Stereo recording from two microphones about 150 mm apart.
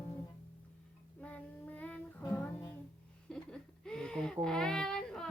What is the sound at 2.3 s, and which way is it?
Music, 15° left (ahead or behind).